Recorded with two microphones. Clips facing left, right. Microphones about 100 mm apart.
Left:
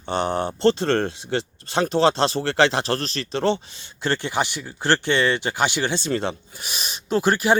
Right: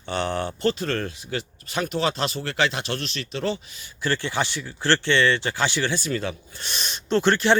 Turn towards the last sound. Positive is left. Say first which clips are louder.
# even
turn(degrees=10)  # may be behind; listen again after turning